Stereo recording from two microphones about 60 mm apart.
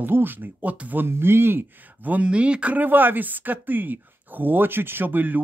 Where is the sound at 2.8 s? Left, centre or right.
Right.